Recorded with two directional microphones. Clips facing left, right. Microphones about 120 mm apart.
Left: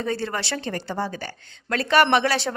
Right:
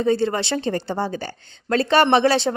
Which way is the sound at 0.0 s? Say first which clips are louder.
Right 7 dB; 25° right (ahead or behind).